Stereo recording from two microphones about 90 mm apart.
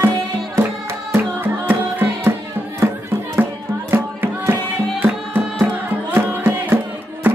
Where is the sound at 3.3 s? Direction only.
25° right (ahead or behind).